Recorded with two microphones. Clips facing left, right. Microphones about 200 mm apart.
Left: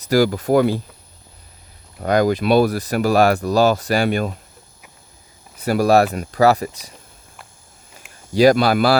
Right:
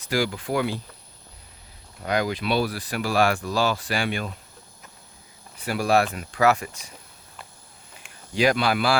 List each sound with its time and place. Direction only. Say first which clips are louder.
0.0 s speech: left 9 dB; 40° left (ahead or behind)
2.0 s speech: left 8 dB; 45° left (ahead or behind)
5.5 s speech: left 7 dB; 40° left (ahead or behind)
8.0 s a sound: left 2 dB; 5° left (ahead or behind)
8.4 s speech: left 8 dB; 40° left (ahead or behind)